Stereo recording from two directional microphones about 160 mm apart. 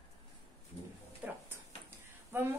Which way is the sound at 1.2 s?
10° right (ahead or behind).